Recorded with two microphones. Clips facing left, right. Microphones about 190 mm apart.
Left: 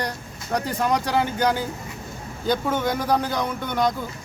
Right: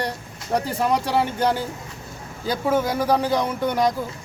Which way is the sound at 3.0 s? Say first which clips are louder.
Right 3 dB; 30° right (ahead or behind).